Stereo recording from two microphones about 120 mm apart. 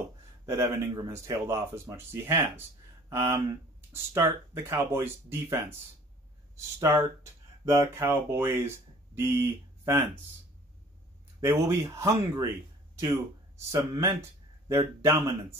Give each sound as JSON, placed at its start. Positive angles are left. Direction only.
{"t": 0.5, "sound": "speech", "side_deg": -25}
{"t": 6.8, "sound": "speech", "side_deg": -25}
{"t": 11.4, "sound": "speech", "side_deg": -25}
{"t": 13.7, "sound": "speech", "side_deg": -25}